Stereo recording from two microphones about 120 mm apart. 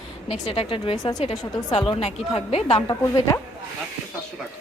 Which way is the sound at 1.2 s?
60° left (ahead or behind).